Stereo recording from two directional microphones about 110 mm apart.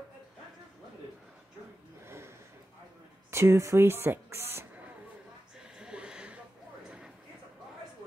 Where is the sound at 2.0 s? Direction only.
25° right (ahead or behind).